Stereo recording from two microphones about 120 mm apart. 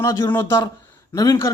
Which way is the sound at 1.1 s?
30° left (ahead or behind).